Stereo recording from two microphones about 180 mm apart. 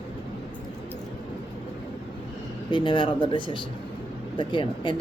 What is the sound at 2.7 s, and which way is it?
A woman's voice, 25° left (ahead or behind).